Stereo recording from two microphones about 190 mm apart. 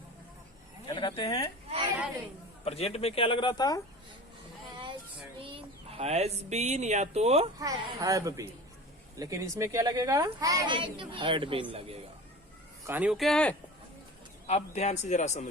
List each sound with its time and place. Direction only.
0.9 s speech: 25° left (ahead or behind)
2.6 s speech: 30° left (ahead or behind)
5.4 s speech: 30° right (ahead or behind)
7.6 s a woman's voice: 20° right (ahead or behind)
12.8 s speech: 10° right (ahead or behind)
14.4 s a man's voice: 35° left (ahead or behind)